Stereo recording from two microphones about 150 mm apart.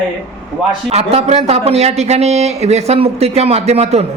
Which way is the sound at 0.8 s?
40° right (ahead or behind).